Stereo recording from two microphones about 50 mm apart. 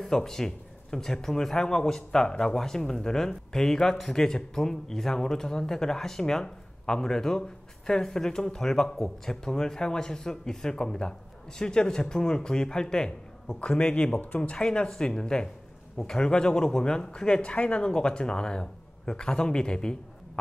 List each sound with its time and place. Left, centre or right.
0.0 s speech: centre; by 14.6 s left
14.6 s speech: centre